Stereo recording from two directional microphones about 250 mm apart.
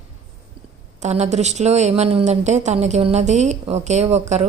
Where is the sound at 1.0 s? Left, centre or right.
Right.